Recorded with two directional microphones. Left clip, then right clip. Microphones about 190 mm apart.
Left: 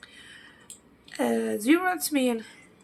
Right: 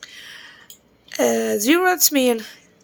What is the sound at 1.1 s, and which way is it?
Speech, 50° right (ahead or behind).